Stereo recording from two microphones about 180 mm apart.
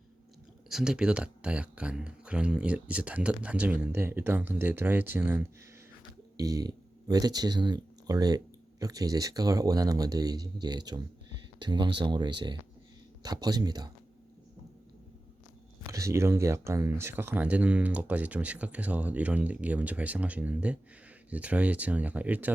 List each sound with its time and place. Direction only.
0.7 s speech: 5° right (ahead or behind); by 13.9 s 20° right (ahead or behind)
15.9 s speech: 15° right (ahead or behind)